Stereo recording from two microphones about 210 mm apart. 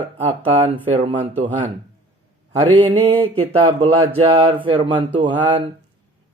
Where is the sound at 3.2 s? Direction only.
25° right (ahead or behind).